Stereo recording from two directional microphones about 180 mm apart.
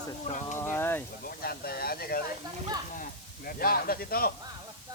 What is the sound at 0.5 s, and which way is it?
Speech, 10° left (ahead or behind).